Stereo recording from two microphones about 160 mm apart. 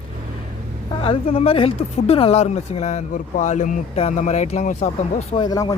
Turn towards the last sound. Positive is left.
turn(degrees=25)  # may be behind; listen again after turning